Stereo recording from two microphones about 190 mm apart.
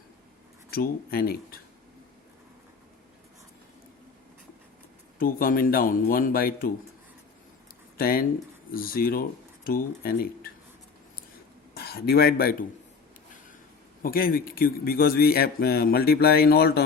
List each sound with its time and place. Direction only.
0.7 s a man's voice: 50° left (ahead or behind)
5.2 s a man's voice: 50° left (ahead or behind)
7.9 s a man's voice: 50° left (ahead or behind)
11.7 s speech: 55° left (ahead or behind)
14.0 s a man's voice: 50° left (ahead or behind)